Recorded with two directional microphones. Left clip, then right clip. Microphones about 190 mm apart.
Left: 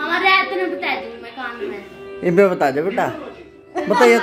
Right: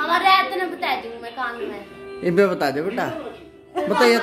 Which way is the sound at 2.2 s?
Centre (ahead or behind).